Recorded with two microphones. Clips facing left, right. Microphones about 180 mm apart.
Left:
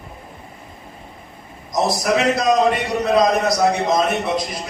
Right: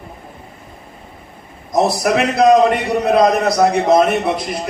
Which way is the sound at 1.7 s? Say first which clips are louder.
Right 3 dB; 60° right (ahead or behind).